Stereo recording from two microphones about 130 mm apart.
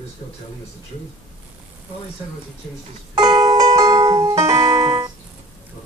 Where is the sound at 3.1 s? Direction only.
30° right (ahead or behind).